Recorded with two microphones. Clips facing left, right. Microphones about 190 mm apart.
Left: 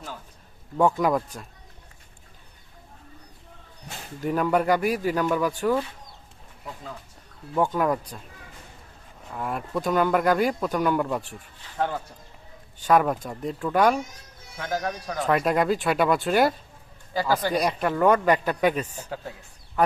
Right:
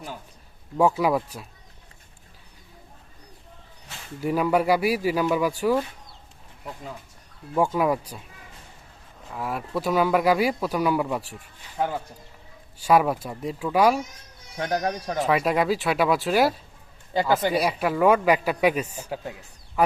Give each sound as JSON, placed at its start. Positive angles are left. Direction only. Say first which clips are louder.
{"t": 0.8, "sound": "speech", "louder": "right 1 dB", "side_deg": -5}
{"t": 4.2, "sound": "speech", "louder": "right 1 dB", "side_deg": -10}
{"t": 7.5, "sound": "speech", "louder": "right 1 dB", "side_deg": -10}
{"t": 9.3, "sound": "speech", "louder": "even", "side_deg": -5}
{"t": 14.5, "sound": "speech", "louder": "right 3 dB", "side_deg": -20}
{"t": 15.3, "sound": "speech", "louder": "left 1 dB", "side_deg": -5}